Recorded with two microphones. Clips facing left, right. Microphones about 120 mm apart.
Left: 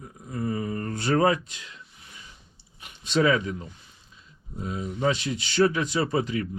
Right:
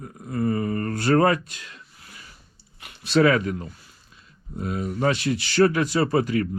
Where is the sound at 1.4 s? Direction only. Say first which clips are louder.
Right 2 dB; 60° right (ahead or behind).